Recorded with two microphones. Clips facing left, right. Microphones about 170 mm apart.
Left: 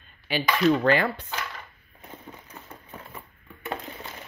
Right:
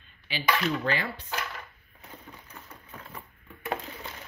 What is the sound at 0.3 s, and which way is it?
Speech, 55° left (ahead or behind).